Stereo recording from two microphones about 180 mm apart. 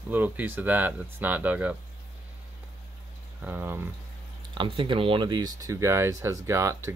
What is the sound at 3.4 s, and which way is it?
Speech, 10° right (ahead or behind).